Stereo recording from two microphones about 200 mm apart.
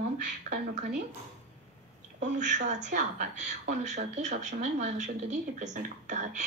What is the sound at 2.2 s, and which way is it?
Speech, 35° right (ahead or behind).